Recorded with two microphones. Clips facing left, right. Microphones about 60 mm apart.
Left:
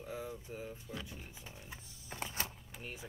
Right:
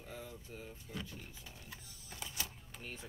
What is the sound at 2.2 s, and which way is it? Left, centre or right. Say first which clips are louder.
Power windows: left 4 dB; left.